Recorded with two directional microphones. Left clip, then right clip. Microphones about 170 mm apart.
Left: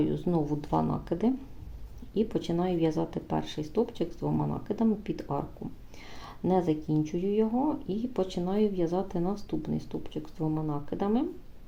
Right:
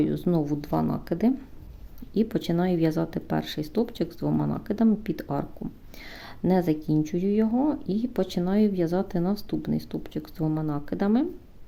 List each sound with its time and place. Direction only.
0.0 s speech: 30° right (ahead or behind)